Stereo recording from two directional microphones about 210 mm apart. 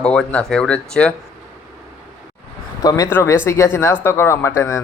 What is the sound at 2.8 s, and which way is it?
Speech, 15° left (ahead or behind).